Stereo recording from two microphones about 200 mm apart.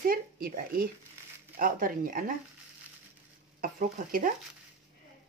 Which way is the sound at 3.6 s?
45° right (ahead or behind).